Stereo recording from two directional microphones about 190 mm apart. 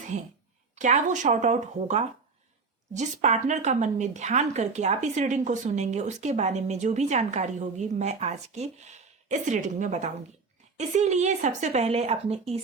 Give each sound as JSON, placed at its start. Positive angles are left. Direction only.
{"t": 0.8, "sound": "speech", "side_deg": -40}